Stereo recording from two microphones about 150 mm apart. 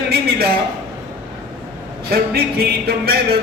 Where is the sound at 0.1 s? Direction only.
90° right.